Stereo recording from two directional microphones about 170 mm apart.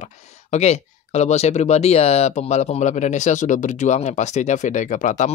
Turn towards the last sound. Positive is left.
turn(degrees=45)  # may be behind; listen again after turning